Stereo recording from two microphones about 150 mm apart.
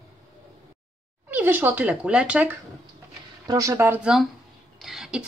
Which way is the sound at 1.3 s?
15° right (ahead or behind).